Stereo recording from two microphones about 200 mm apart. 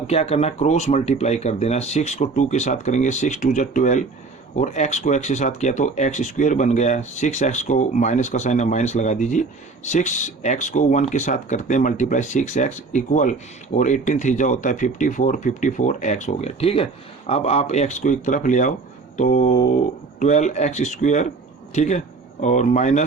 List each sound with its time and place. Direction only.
0.1 s speech: 30° left (ahead or behind)